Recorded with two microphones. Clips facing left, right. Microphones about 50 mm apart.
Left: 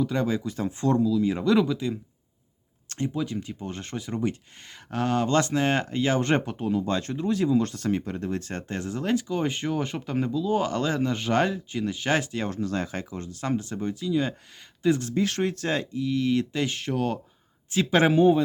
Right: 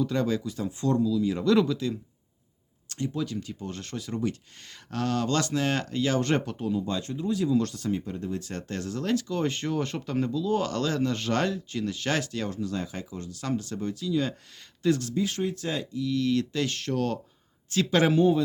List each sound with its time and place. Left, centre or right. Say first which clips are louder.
0.0 s speech: left 1 dB; centre
0.4 s speech: left 2 dB; left
1.4 s speech: left 1 dB; centre
3.1 s speech: even; centre
6.7 s speech: left 4 dB; left
7.4 s speech: left 2 dB; left
7.8 s speech: left 3 dB; left
8.4 s speech: left 2 dB; left
8.7 s speech: left 1 dB; left
12.5 s speech: left 3 dB; left
13.2 s speech: left 2 dB; left
15.1 s speech: left 3 dB; left
16.0 s speech: right 1 dB; left